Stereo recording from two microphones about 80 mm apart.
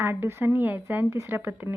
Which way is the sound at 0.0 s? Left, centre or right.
Right.